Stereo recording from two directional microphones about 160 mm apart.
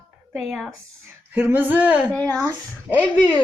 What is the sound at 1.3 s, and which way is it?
A child's voice, 10° right (ahead or behind).